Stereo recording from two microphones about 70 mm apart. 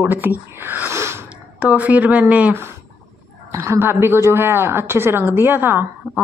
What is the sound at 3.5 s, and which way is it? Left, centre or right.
A woman's voice, right.